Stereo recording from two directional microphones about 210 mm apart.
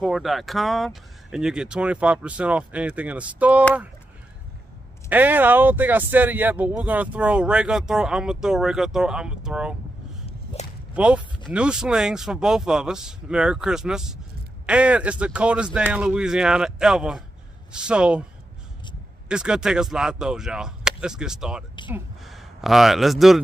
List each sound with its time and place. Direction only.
0.0 s speech: centre (ahead or behind)
5.1 s speech: 10° right (ahead or behind)
10.2 s whip: 30° left (ahead or behind)
11.0 s speech: 5° right (ahead or behind)
19.2 s speech: 5° right (ahead or behind)